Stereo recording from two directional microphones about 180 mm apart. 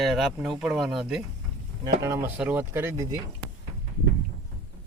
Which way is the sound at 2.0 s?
15° right (ahead or behind).